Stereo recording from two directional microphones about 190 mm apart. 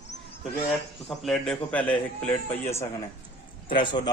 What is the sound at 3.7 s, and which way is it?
Speech, 25° left (ahead or behind).